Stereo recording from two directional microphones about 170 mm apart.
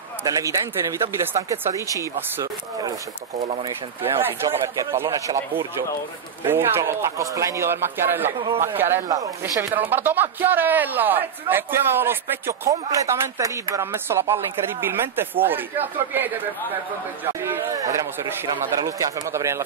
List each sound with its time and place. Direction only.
0.3 s speech: 20° right (ahead or behind)